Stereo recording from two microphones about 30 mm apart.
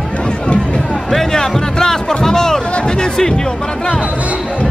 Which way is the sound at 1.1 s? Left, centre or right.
Centre.